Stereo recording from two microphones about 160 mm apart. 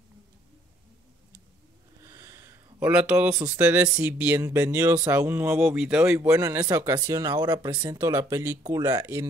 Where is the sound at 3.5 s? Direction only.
10° right (ahead or behind).